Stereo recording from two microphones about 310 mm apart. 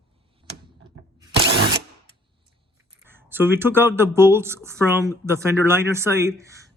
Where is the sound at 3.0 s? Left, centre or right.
Centre.